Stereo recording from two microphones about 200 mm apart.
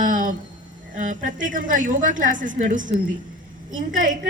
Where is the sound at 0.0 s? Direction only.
40° right (ahead or behind).